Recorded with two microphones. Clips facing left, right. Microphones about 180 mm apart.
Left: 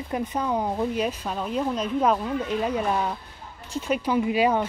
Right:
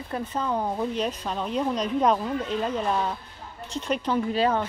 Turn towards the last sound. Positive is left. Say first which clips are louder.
# left 2 dB
turn(degrees=10)  # may be behind; listen again after turning